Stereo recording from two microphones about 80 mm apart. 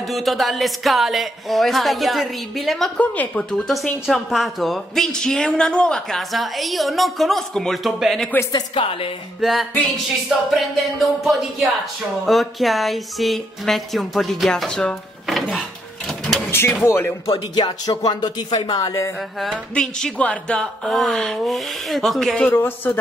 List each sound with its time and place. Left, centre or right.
0.1 s speech: centre
3.0 s speech: centre
4.0 s speech: centre
8.5 s speech: left
9.4 s speech: centre
16.1 s a sound: centre
16.4 s door: left
16.8 s speech: left
17.3 s speech: left
17.8 s speech: left
19.7 s speech: centre
20.9 s speech: centre
22.5 s speech: left